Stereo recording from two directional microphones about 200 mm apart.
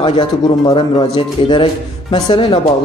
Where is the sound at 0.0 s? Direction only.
25° left (ahead or behind).